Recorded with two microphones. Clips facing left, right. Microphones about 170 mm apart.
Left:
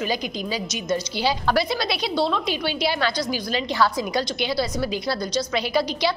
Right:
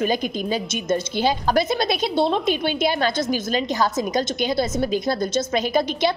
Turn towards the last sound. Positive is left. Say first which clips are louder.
# right 2 dB
turn(degrees=-50)  # may be behind; listen again after turning